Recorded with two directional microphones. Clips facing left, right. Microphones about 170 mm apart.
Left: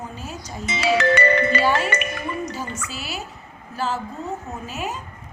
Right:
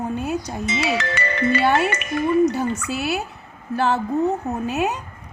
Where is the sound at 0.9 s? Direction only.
60° left (ahead or behind).